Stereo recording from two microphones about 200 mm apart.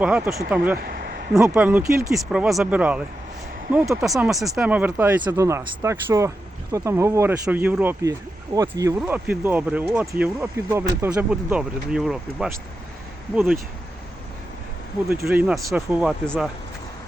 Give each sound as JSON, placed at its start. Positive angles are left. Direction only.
{"t": 0.0, "sound": "speech", "side_deg": -5}
{"t": 0.8, "sound": "speech", "side_deg": -50}
{"t": 1.3, "sound": "speech", "side_deg": -5}
{"t": 15.1, "sound": "speech", "side_deg": -10}
{"t": 16.2, "sound": "speech", "side_deg": 5}